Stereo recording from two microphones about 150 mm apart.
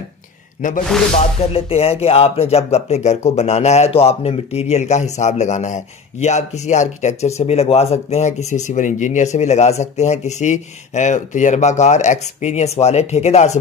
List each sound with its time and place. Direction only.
0.6 s speech: 60° left (ahead or behind)
1.1 s speech: 40° left (ahead or behind)